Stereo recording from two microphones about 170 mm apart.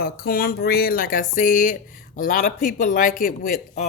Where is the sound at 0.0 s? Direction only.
60° left (ahead or behind).